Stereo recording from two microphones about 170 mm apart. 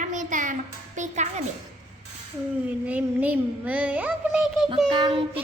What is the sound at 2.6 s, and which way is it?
A child's voice, 10° right (ahead or behind).